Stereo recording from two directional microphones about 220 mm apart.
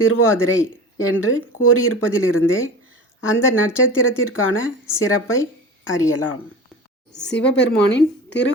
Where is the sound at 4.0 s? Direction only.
65° left (ahead or behind).